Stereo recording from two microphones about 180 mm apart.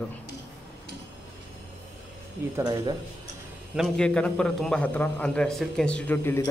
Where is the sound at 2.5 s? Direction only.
20° right (ahead or behind).